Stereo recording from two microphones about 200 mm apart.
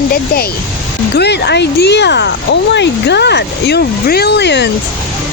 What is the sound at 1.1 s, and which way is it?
Speech, 55° left (ahead or behind).